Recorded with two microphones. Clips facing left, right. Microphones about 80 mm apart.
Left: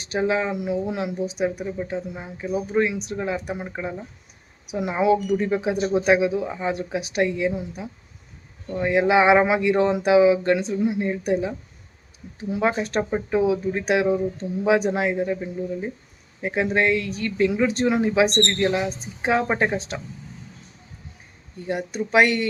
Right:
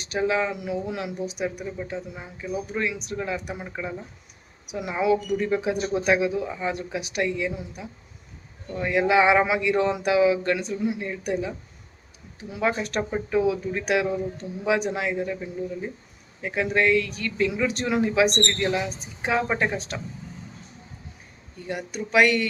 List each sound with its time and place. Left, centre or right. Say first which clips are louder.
0.0 s speech: left 1 dB; left
21.7 s speech: left 4 dB; left